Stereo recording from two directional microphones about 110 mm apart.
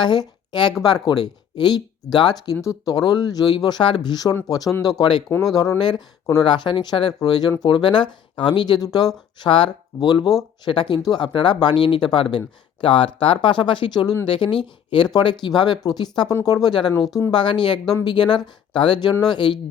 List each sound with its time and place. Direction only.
0.0 s a woman's voice: 40° left (ahead or behind)
10.1 s speech: 35° left (ahead or behind)
10.7 s speech: 45° left (ahead or behind)